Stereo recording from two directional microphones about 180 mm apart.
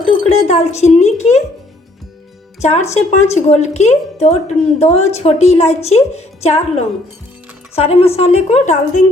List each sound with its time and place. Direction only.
0.0 s speech: 35° left (ahead or behind)
2.6 s a woman's voice: 40° left (ahead or behind)